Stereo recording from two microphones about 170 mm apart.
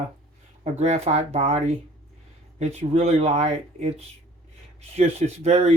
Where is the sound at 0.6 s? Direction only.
40° right (ahead or behind).